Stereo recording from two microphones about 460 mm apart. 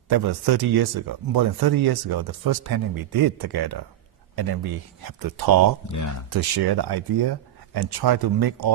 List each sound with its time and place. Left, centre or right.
0.4 s speech: right